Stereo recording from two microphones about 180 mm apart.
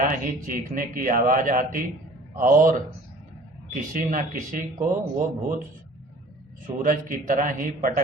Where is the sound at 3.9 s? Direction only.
50° right (ahead or behind).